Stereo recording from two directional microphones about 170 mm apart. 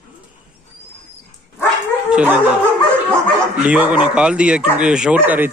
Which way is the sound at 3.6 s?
10° right (ahead or behind).